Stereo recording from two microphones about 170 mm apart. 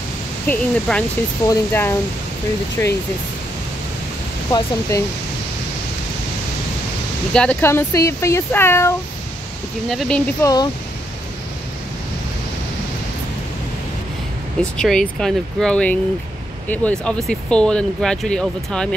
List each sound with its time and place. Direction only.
0.5 s speech: 5° left (ahead or behind)
4.5 s speech: 20° left (ahead or behind)
7.3 s speech: 10° left (ahead or behind)
9.8 s speech: centre (ahead or behind)
10.4 s speech: 20° left (ahead or behind)
14.6 s speech: 5° left (ahead or behind)